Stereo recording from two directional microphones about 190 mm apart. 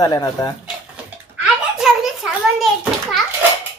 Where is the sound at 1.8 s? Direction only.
Centre (ahead or behind).